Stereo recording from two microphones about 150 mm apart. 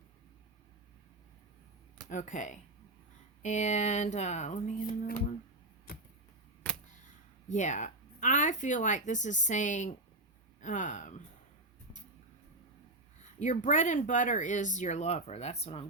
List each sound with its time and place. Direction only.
2.0 s speech: 60° left (ahead or behind)
7.4 s speech: 55° left (ahead or behind)
13.4 s speech: 55° left (ahead or behind)